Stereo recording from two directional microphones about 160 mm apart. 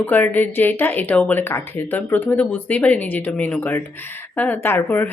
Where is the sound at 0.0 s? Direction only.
10° left (ahead or behind).